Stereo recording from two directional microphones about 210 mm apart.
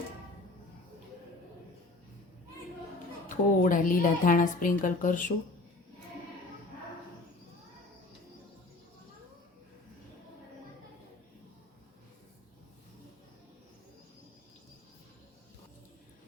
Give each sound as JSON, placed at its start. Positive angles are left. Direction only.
{"t": 3.2, "sound": "a woman's voice", "side_deg": 40}